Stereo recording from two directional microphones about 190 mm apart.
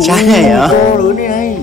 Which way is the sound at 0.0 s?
Centre (ahead or behind).